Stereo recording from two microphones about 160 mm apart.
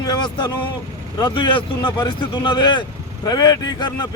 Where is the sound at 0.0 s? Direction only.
25° left (ahead or behind).